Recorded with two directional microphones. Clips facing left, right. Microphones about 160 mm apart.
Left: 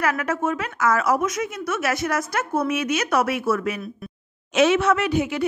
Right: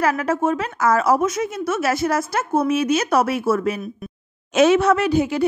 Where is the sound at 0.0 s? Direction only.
30° right (ahead or behind).